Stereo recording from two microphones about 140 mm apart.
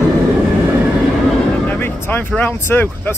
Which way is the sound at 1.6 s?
15° left (ahead or behind).